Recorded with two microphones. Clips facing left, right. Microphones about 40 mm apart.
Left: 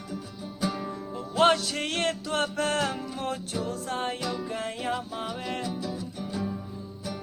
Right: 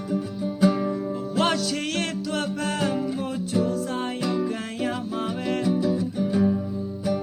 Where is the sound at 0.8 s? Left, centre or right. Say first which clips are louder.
Right 9 dB; centre.